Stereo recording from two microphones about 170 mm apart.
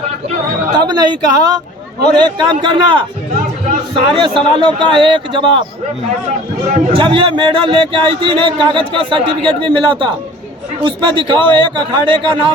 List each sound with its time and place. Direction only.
0.7 s speech: 25° right (ahead or behind)
6.9 s speech: 30° right (ahead or behind)